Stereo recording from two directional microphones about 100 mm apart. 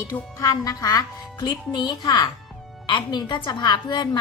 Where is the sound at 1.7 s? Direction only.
50° left (ahead or behind).